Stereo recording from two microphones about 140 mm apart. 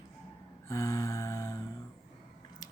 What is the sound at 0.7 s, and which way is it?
Speech, 25° left (ahead or behind).